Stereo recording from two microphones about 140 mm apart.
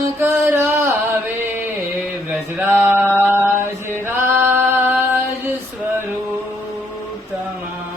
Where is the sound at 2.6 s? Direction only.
15° right (ahead or behind).